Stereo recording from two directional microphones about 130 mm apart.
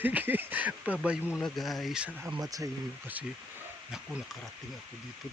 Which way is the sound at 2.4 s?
25° right (ahead or behind).